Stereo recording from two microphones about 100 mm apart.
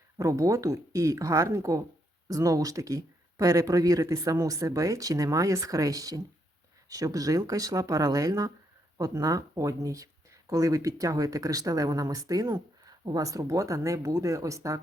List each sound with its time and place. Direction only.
0.2 s speech: 30° right (ahead or behind)